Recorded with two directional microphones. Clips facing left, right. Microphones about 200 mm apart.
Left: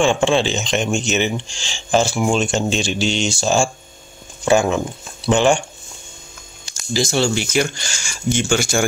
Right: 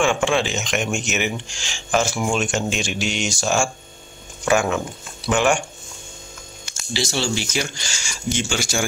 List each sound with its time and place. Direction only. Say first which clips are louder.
0.0 s speech: left 3 dB; 30° left (ahead or behind)
6.6 s speech: left 5 dB; 40° left (ahead or behind)